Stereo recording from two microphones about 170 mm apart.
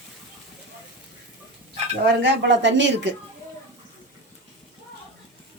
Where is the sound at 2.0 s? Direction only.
90° right.